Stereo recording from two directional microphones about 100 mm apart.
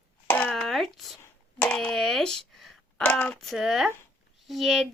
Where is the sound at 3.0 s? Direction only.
15° left (ahead or behind).